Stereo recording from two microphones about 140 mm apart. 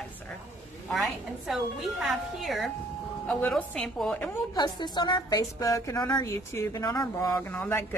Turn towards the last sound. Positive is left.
turn(degrees=15)  # may be behind; listen again after turning